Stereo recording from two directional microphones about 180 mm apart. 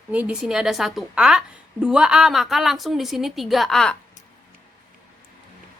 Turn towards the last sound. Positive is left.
turn(degrees=0)  # may be behind; listen again after turning